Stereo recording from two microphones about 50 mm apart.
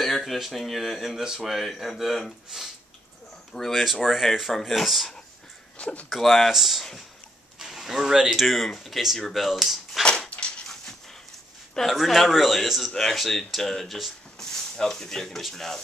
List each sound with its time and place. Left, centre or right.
0.0 s speech: centre
5.8 s speech: left
6.0 s speech: centre
11.7 s speech: centre